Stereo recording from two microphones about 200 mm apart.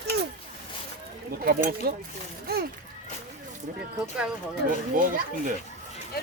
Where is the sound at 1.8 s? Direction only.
50° right (ahead or behind).